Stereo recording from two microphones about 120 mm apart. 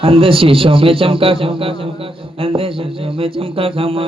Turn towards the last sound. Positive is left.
turn(degrees=-50)  # may be behind; listen again after turning